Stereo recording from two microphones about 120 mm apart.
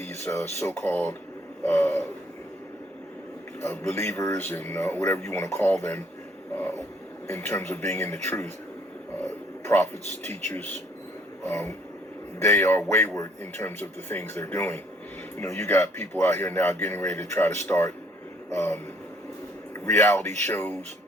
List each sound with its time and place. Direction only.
0.1 s speech: 20° left (ahead or behind)
3.6 s speech: 20° left (ahead or behind)
19.8 s speech: 20° left (ahead or behind)